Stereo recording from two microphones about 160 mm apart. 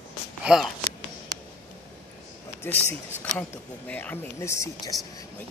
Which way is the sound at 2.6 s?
15° left (ahead or behind).